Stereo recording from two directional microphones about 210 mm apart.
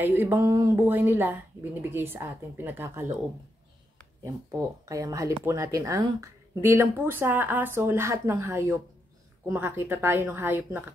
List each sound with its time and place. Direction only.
0.0 s speech: 10° right (ahead or behind)
4.2 s speech: 15° right (ahead or behind)